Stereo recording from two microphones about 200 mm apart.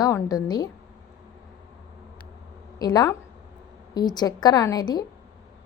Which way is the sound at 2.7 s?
20° left (ahead or behind).